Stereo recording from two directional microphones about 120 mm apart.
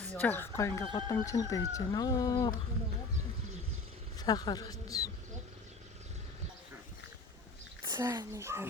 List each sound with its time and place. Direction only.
0.1 s speech: 15° left (ahead or behind); by 2.5 s 30° left (ahead or behind)
4.2 s a woman's voice: 35° left (ahead or behind)
7.9 s a child's voice: 25° right (ahead or behind)